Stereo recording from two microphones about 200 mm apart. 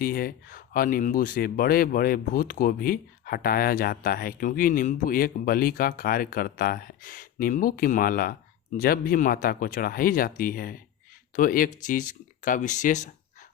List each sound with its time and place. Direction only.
0.0 s speech: 45° left (ahead or behind)